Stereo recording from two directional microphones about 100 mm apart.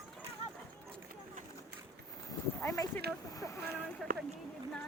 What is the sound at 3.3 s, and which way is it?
Boat, 30° left (ahead or behind).